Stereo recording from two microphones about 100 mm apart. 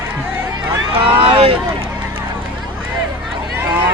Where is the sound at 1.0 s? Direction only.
65° right (ahead or behind).